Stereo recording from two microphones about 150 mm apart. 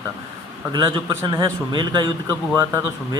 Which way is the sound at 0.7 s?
30° right (ahead or behind).